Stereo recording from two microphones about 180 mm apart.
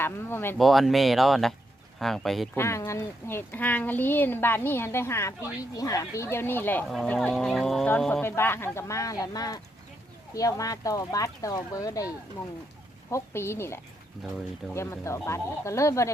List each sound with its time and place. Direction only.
0.0 s speech: 15° left (ahead or behind)
0.6 s speech: centre (ahead or behind)
2.6 s speech: 15° left (ahead or behind)
13.1 s speech: 15° left (ahead or behind)